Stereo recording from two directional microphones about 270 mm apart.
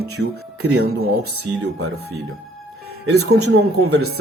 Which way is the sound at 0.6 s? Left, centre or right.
Right.